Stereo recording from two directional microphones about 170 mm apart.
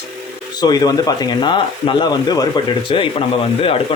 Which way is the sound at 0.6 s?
25° left (ahead or behind).